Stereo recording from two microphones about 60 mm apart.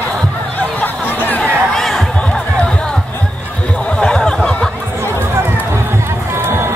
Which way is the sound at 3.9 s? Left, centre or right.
Centre.